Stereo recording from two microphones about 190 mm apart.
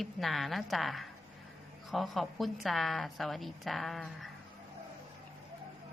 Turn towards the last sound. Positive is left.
turn(degrees=0)  # may be behind; listen again after turning